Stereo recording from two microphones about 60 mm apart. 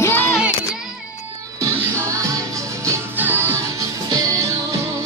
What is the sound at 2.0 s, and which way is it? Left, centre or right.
Music, right.